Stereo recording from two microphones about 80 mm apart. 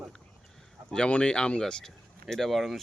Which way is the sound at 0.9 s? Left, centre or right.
Centre.